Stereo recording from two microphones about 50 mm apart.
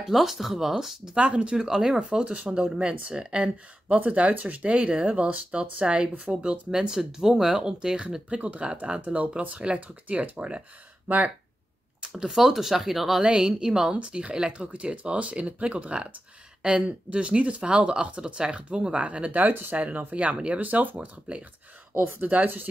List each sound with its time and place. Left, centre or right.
0.1 s speech: centre
1.1 s speech: right
2.0 s speech: right
8.4 s speech: right
12.1 s speech: centre
13.2 s speech: centre
20.6 s speech: right